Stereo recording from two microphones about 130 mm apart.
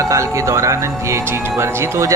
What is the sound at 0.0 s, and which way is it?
Speech, 25° right (ahead or behind).